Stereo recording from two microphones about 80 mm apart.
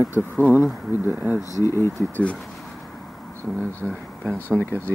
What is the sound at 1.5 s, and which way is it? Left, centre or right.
Speech, left.